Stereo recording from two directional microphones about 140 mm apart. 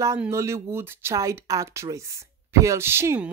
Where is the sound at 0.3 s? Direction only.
20° right (ahead or behind).